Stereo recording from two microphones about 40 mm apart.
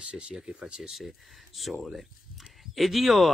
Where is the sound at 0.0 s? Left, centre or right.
Right.